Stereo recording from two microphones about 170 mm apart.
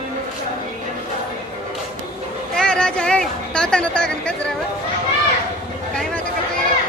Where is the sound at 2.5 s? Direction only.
5° left (ahead or behind).